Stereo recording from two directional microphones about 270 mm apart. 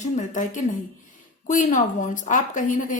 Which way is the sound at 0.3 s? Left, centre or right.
Left.